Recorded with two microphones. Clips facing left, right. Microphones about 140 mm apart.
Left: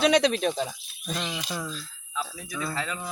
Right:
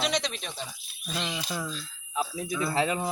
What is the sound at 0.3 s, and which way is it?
Speech, 50° left (ahead or behind).